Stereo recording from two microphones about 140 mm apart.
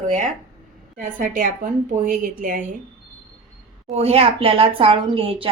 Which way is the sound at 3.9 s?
45° right (ahead or behind).